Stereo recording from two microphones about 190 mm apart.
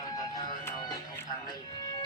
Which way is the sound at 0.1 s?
20° left (ahead or behind).